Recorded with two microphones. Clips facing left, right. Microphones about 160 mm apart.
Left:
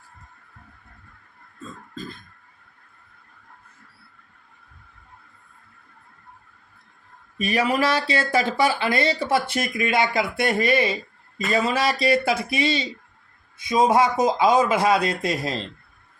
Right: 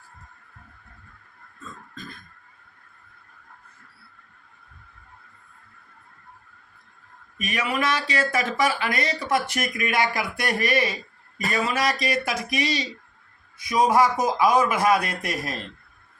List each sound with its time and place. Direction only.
7.3 s speech: 30° left (ahead or behind)